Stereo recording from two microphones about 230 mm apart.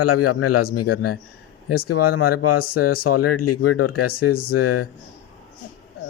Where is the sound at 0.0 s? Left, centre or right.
Left.